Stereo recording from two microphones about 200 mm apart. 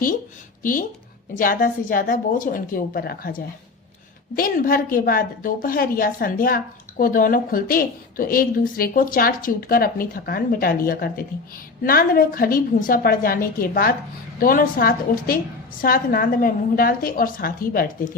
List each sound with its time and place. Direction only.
0.6 s a woman's voice: 45° left (ahead or behind)